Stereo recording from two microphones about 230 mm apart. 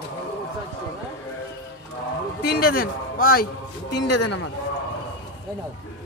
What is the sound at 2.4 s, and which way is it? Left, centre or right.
A man's voice, left.